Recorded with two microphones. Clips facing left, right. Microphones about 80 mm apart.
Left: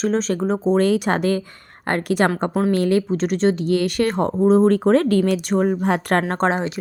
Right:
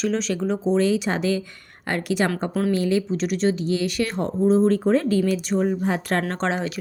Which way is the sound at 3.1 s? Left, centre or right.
Left.